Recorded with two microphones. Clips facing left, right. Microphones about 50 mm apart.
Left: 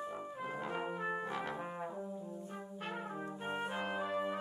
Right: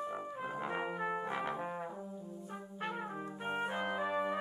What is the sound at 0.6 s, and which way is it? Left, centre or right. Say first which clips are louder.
Brass instrument: right 2 dB; centre.